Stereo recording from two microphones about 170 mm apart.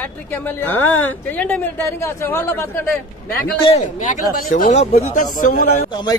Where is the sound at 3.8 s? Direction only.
55° left (ahead or behind).